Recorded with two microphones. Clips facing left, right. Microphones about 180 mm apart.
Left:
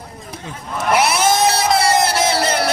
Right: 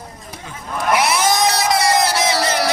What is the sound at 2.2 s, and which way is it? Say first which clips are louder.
Music: left 1 dB; 25° left (ahead or behind).